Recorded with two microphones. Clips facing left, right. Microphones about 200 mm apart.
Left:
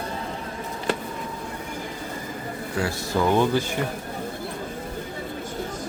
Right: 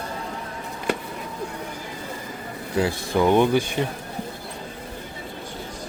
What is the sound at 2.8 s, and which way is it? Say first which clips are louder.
Speech: right 3 dB; 20° right (ahead or behind).